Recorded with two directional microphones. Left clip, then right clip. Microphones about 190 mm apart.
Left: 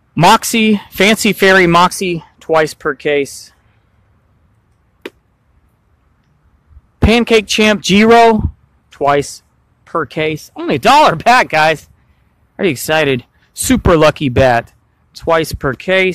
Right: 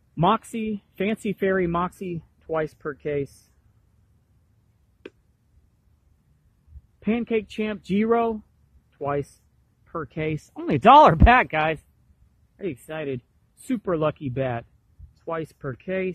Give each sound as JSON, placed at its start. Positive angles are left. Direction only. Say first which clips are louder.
{"t": 0.1, "sound": "speech", "louder": "left 13 dB", "side_deg": 25}
{"t": 7.1, "sound": "speech", "louder": "left 15 dB", "side_deg": 20}
{"t": 10.1, "sound": "speech", "louder": "left 12 dB", "side_deg": 0}
{"t": 11.3, "sound": "speech", "louder": "left 10 dB", "side_deg": 5}
{"t": 12.5, "sound": "speech", "louder": "left 19 dB", "side_deg": 25}